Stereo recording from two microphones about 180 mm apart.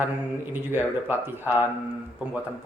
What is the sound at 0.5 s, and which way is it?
Speech, 10° right (ahead or behind).